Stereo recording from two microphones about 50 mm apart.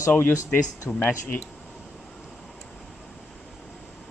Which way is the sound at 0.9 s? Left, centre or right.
Left.